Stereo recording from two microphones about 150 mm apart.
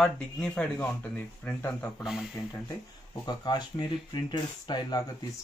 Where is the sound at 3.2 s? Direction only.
30° left (ahead or behind).